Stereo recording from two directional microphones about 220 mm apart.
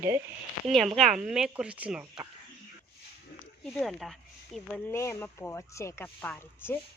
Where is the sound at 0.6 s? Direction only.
Centre (ahead or behind).